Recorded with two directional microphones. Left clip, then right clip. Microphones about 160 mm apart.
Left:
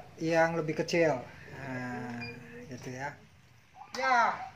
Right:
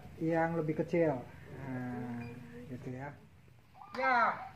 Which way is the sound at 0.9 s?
35° left (ahead or behind).